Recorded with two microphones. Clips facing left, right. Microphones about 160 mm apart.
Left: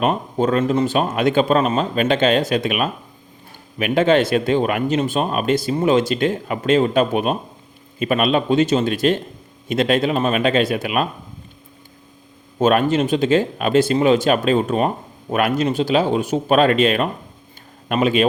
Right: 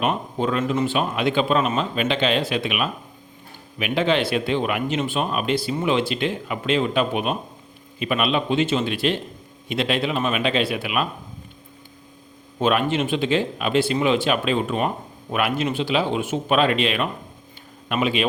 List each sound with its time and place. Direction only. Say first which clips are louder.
0.0 s speech: left 4 dB; 40° left (ahead or behind)
12.5 s speech: left 5 dB; 45° left (ahead or behind)